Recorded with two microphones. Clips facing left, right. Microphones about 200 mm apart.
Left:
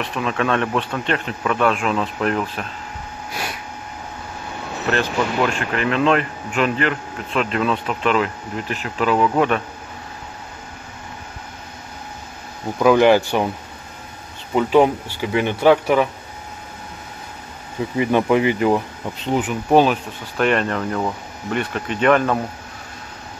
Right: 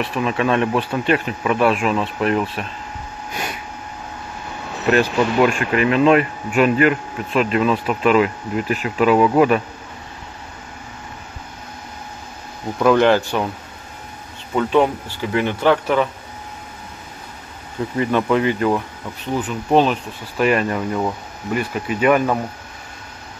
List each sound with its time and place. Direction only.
0.0 s speech: 5° right (ahead or behind)
4.9 s speech: 10° right (ahead or behind)
12.7 s speech: 5° left (ahead or behind)
14.5 s speech: 10° left (ahead or behind)
17.9 s speech: 15° left (ahead or behind); by 22.4 s 10° right (ahead or behind)